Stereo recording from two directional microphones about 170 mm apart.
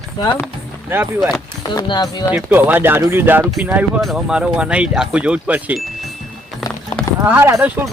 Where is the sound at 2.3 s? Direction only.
10° right (ahead or behind).